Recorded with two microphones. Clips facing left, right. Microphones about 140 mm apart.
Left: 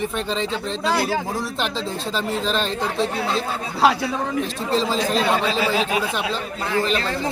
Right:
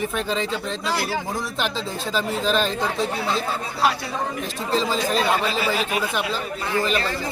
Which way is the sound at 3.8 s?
90° left.